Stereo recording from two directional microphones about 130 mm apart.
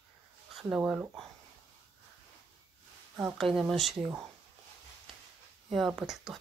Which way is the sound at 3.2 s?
5° right (ahead or behind).